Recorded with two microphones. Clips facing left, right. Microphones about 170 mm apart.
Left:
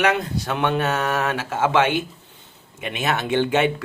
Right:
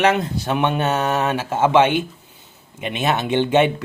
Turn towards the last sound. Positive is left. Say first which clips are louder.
# right 3 dB
turn(degrees=-20)  # may be behind; listen again after turning